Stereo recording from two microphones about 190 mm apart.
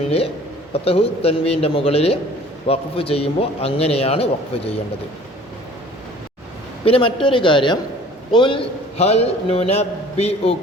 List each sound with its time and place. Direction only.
0.7 s a man's voice: 30° left (ahead or behind)
6.8 s a woman's voice: 30° left (ahead or behind)